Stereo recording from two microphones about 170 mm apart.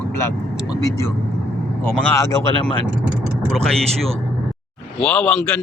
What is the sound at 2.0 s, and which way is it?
Speech, 15° left (ahead or behind).